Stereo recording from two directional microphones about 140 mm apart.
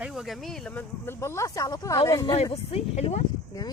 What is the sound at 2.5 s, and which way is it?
Speech, 50° left (ahead or behind).